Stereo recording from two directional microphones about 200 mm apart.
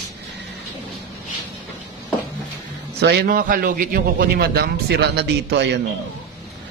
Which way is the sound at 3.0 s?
55° right (ahead or behind).